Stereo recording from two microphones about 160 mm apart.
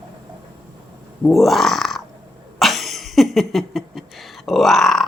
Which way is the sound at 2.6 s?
Centre (ahead or behind).